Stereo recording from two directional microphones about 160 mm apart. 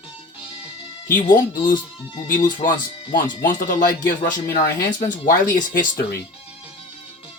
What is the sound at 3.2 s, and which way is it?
Speech, 55° left (ahead or behind).